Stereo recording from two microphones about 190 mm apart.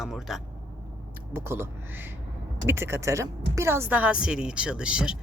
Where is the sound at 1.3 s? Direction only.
10° right (ahead or behind).